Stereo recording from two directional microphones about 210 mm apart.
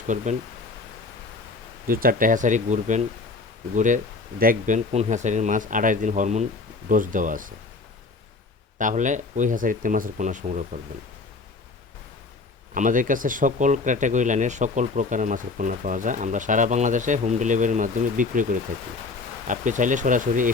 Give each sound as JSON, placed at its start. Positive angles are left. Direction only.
{"t": 0.1, "sound": "speech", "side_deg": -35}
{"t": 1.9, "sound": "speech", "side_deg": -45}
{"t": 8.8, "sound": "speech", "side_deg": -35}
{"t": 12.7, "sound": "speech", "side_deg": -40}
{"t": 19.5, "sound": "speech", "side_deg": -35}